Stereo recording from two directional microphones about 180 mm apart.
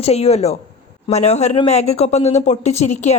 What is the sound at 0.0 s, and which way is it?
Speech, 35° left (ahead or behind).